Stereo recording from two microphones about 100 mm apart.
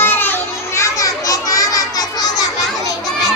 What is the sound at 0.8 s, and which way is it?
Children playing, 35° left (ahead or behind).